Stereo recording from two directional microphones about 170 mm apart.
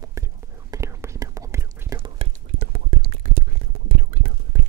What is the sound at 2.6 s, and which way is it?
Whispering, 60° right (ahead or behind).